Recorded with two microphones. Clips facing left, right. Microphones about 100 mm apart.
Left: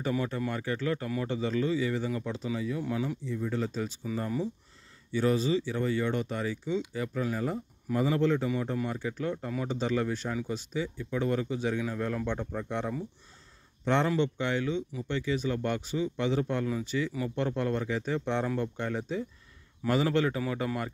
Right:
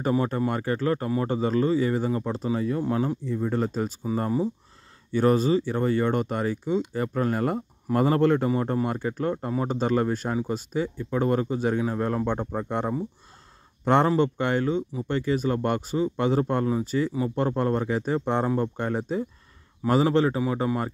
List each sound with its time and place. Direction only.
0.1 s speech: 35° right (ahead or behind)
5.1 s speech: 50° right (ahead or behind)
14.0 s a man's voice: 45° right (ahead or behind)